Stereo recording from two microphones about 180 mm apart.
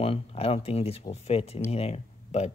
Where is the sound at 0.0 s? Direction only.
30° left (ahead or behind).